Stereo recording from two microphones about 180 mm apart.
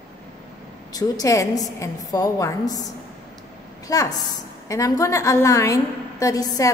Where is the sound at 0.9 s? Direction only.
20° left (ahead or behind).